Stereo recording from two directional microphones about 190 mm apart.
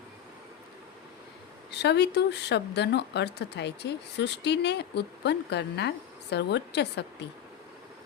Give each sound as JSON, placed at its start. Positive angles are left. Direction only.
{"t": 1.7, "sound": "speech", "side_deg": 60}